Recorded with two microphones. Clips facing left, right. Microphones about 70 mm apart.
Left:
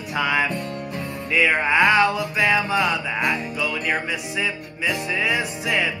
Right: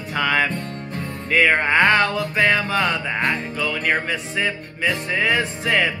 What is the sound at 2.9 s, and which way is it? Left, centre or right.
Music, right.